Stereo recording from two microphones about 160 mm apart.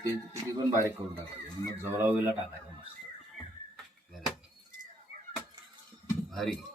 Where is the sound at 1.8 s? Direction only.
15° right (ahead or behind).